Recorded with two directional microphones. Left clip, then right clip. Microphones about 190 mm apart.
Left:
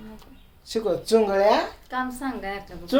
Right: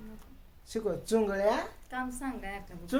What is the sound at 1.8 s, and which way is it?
Speech, 20° left (ahead or behind).